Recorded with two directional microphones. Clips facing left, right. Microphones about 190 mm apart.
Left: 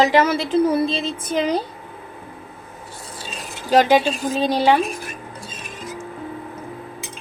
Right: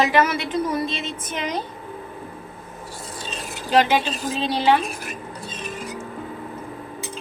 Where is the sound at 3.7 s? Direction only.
40° left (ahead or behind).